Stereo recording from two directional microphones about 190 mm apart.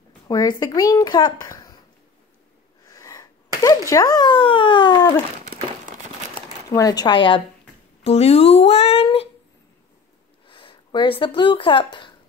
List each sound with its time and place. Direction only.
0.3 s speech: 20° left (ahead or behind)
2.9 s a sound: 15° left (ahead or behind)
3.6 s speech: 20° left (ahead or behind)
5.4 s a sound: 45° right (ahead or behind)
6.7 s speech: 20° left (ahead or behind)
10.4 s speech: 25° left (ahead or behind)